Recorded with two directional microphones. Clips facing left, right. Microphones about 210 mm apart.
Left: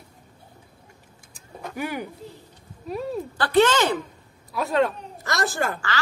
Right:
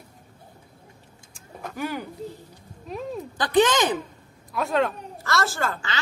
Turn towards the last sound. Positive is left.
turn(degrees=15)  # may be behind; listen again after turning